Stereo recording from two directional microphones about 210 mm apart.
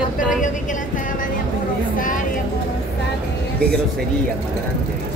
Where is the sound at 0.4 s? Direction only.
35° left (ahead or behind).